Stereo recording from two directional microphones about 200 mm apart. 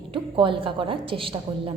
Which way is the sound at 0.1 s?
25° right (ahead or behind).